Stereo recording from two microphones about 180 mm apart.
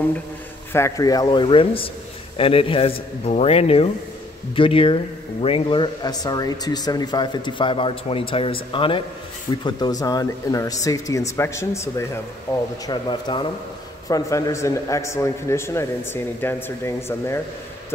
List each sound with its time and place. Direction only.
0.7 s a man's voice: 15° left (ahead or behind)